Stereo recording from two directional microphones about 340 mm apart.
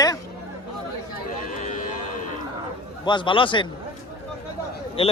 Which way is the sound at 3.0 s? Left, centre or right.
Centre.